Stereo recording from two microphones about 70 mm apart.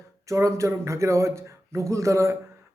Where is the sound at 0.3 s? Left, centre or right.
Right.